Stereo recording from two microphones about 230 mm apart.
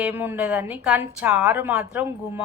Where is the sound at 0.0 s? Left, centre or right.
Centre.